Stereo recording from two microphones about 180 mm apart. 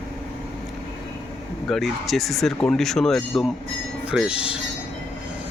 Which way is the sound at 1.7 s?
Centre (ahead or behind).